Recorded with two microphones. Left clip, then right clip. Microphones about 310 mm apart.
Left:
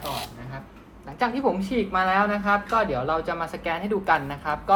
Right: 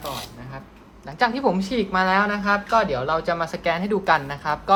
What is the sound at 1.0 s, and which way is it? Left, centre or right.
Speech, right.